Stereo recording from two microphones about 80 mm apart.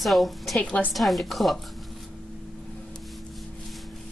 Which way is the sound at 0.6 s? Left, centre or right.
Centre.